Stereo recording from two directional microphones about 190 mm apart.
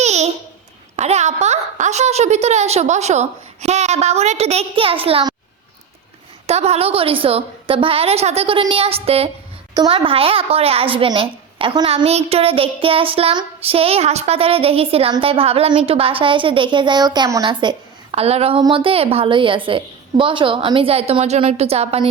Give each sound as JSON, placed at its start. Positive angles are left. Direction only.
{"t": 0.0, "sound": "babbling", "side_deg": -35}
{"t": 0.9, "sound": "a woman's voice", "side_deg": -35}
{"t": 6.5, "sound": "a woman's voice", "side_deg": -35}